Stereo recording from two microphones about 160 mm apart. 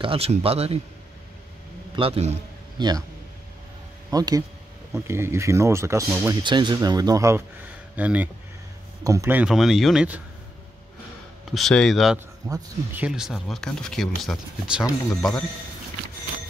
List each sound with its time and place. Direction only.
0.0 s a man's voice: 35° right (ahead or behind)
2.0 s a man's voice: 40° right (ahead or behind)
4.1 s speech: 25° right (ahead or behind)
6.4 s speech: 30° right (ahead or behind)
9.4 s speech: 5° right (ahead or behind)
11.5 s speech: centre (ahead or behind)
12.4 s speech: 20° right (ahead or behind)
12.9 s speech: 5° right (ahead or behind)